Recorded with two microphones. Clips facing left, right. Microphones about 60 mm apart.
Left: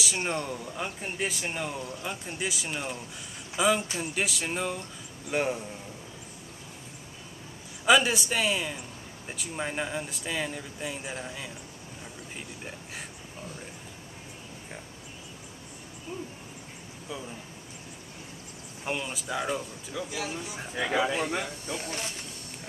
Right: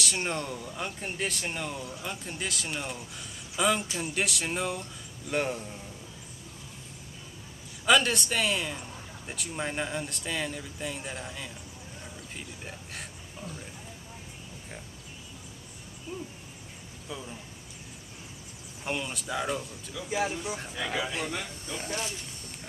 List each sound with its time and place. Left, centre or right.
0.0 s speech: centre
7.8 s speech: centre
12.4 s a sound: centre
18.9 s speech: centre
20.1 s speech: right
20.7 s speech: left